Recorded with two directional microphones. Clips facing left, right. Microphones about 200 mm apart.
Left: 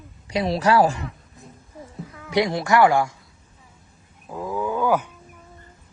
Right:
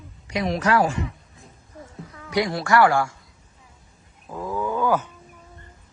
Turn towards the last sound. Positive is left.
turn(degrees=15)  # may be behind; listen again after turning